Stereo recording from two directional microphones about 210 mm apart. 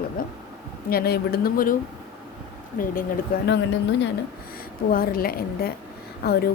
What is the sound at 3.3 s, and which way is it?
Speech, 45° left (ahead or behind).